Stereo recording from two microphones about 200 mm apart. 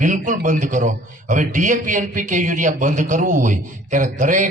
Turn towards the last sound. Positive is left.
turn(degrees=-40)  # may be behind; listen again after turning